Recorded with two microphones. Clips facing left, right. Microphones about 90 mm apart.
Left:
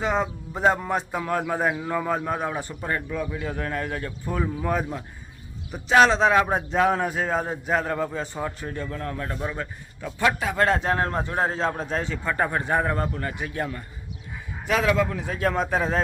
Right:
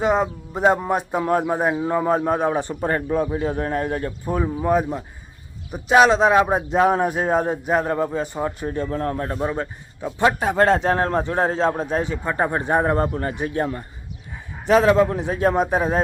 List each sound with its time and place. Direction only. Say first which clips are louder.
0.0 s a man's voice: right 5 dB; 10° right (ahead or behind)
8.9 s a man's voice: right 7 dB; 35° right (ahead or behind)
15.5 s a man's voice: right 4 dB; 15° right (ahead or behind)